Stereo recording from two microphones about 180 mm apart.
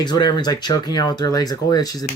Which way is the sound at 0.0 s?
25° left (ahead or behind).